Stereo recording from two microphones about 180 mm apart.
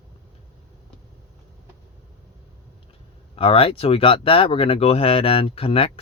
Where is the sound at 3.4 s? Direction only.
30° left (ahead or behind).